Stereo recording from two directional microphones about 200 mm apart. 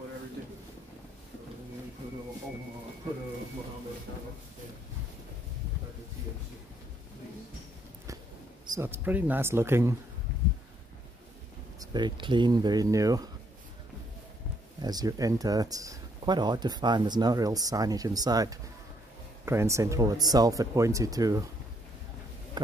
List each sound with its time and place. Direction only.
8.7 s speech: 10° right (ahead or behind)
11.8 s speech: 20° right (ahead or behind)
14.8 s speech: 20° right (ahead or behind)